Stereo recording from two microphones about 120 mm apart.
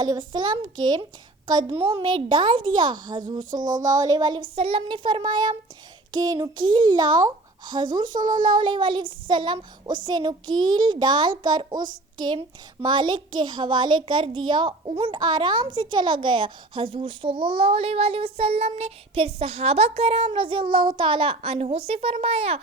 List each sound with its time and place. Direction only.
0.0 s a woman's voice: 35° right (ahead or behind)
3.5 s a sound: 90° right
3.8 s a woman's voice: 30° right (ahead or behind)
4.5 s a woman's voice: 50° right (ahead or behind)